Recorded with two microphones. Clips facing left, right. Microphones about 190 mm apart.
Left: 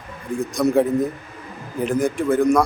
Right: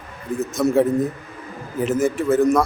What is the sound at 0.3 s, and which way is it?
A man's voice, centre (ahead or behind).